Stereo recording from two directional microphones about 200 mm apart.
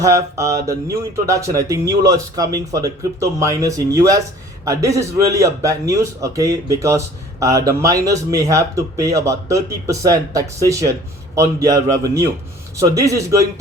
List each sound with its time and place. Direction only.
0.0 s speech: 15° right (ahead or behind)